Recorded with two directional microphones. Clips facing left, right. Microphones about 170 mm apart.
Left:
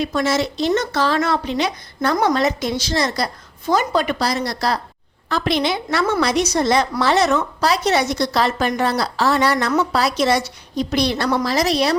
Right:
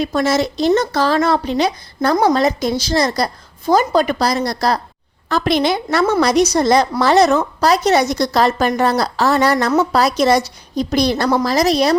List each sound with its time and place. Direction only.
0.0 s speech: 40° right (ahead or behind)